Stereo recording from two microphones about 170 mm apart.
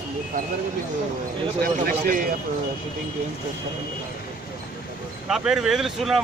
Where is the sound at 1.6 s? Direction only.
55° right (ahead or behind).